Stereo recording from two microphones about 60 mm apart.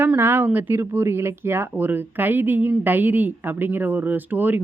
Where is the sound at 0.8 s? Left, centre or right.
Right.